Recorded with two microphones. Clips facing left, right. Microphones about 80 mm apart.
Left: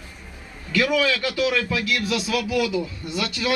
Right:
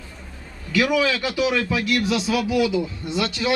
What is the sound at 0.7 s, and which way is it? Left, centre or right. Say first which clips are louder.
A man's voice: right 1 dB; centre.